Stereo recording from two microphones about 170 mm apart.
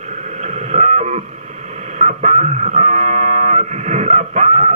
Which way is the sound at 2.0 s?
45° right (ahead or behind).